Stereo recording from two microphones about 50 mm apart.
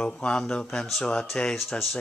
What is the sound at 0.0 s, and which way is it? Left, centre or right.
Speech, left.